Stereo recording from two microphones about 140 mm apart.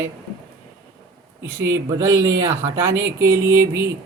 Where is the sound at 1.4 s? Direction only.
20° right (ahead or behind).